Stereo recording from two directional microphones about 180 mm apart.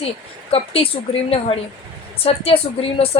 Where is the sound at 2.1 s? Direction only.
30° left (ahead or behind).